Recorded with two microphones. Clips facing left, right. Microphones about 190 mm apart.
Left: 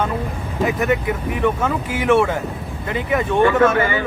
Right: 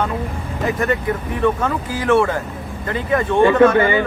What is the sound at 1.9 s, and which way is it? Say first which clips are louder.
Speech: even; 25° left (ahead or behind).